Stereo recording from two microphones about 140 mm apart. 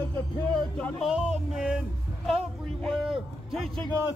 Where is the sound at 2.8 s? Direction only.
Centre (ahead or behind).